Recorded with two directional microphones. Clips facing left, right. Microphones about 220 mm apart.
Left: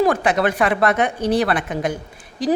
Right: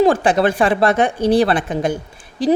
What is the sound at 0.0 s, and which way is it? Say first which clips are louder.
A woman's voice: right 3 dB; 30° right (ahead or behind).